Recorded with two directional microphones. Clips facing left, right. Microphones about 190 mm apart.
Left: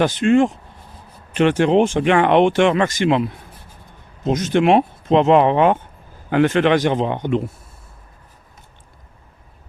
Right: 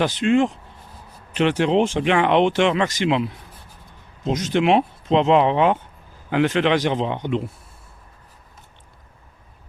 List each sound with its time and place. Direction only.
0.0 s speech: 50° left (ahead or behind)
4.3 s speech: 50° left (ahead or behind)